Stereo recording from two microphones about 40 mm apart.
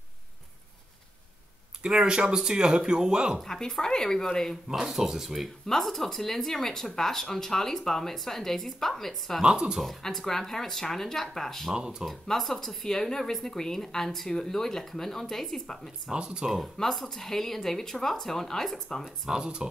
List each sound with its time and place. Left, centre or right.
1.8 s speech: right
3.3 s speech: centre
4.6 s speech: centre
5.7 s speech: centre
9.4 s speech: right
10.0 s speech: centre
11.7 s speech: centre
12.1 s speech: centre
16.1 s speech: right
16.7 s speech: centre
19.0 s speech: centre
19.4 s speech: right